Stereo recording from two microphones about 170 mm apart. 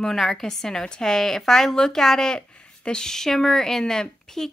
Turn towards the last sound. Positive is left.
turn(degrees=0)  # may be behind; listen again after turning